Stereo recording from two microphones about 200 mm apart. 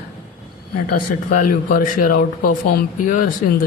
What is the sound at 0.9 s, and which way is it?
Speech, 45° left (ahead or behind).